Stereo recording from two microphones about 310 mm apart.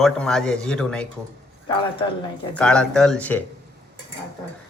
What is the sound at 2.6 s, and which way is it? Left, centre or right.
Speech, centre.